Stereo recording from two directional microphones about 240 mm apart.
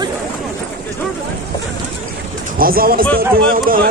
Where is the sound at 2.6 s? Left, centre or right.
Right.